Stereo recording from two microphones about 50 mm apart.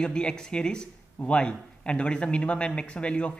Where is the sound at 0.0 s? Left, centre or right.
Centre.